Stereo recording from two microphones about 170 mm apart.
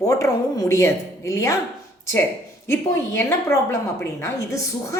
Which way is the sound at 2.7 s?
15° left (ahead or behind).